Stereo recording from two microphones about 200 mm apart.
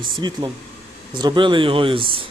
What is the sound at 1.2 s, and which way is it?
Speech, 20° right (ahead or behind).